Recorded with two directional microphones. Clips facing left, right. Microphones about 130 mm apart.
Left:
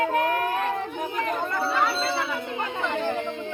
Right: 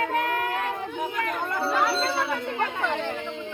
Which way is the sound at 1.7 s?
Centre (ahead or behind).